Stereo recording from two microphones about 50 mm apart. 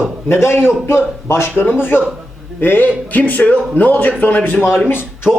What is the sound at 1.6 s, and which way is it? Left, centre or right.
Speech, left.